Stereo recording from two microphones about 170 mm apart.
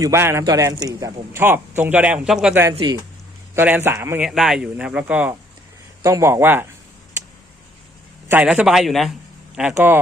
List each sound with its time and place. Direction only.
0.0 s a man's voice: 15° right (ahead or behind)
4.3 s a man's voice: centre (ahead or behind)
8.3 s a man's voice: 10° right (ahead or behind)